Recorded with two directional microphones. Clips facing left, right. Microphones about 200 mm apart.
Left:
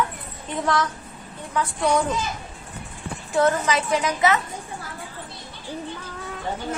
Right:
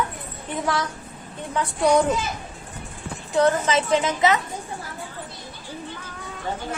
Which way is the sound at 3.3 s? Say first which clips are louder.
Right 1 dB; 20° right (ahead or behind).